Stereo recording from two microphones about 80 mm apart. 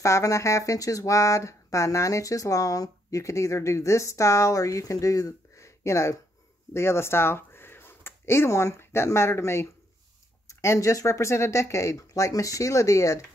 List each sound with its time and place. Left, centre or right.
0.0 s speech: left